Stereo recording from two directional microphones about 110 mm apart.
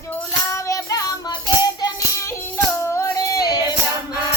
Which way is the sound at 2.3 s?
25° left (ahead or behind).